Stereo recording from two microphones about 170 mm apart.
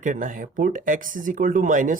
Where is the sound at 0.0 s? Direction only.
50° right (ahead or behind).